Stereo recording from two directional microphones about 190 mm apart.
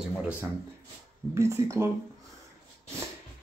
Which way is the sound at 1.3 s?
15° right (ahead or behind).